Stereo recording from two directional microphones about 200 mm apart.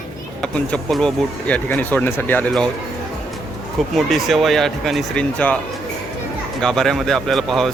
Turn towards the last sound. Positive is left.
turn(degrees=0)  # may be behind; listen again after turning